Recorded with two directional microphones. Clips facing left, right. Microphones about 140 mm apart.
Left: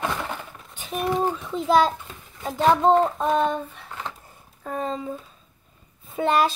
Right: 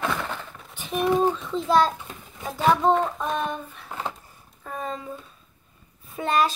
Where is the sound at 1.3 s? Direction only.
15° left (ahead or behind).